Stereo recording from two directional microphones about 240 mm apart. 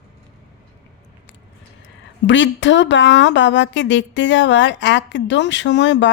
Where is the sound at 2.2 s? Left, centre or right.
Left.